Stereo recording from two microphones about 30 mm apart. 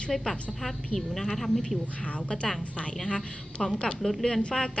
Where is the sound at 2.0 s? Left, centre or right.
Left.